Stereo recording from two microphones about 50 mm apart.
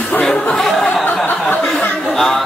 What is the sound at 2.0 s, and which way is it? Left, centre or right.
Music, centre.